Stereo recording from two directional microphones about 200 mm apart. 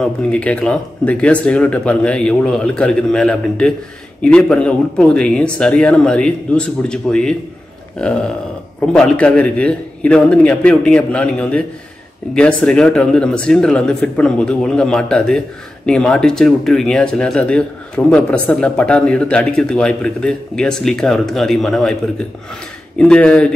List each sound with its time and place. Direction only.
0.0 s speech: 5° left (ahead or behind)
8.9 s speech: 5° left (ahead or behind)
22.9 s speech: 5° left (ahead or behind)